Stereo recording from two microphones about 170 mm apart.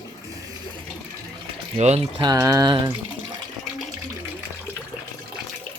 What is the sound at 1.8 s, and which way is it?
Speech, 35° right (ahead or behind).